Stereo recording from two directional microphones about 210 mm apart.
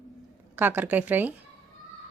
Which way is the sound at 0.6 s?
10° right (ahead or behind).